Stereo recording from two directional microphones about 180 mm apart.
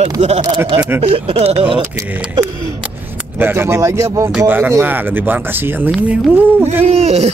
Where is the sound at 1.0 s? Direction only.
30° right (ahead or behind).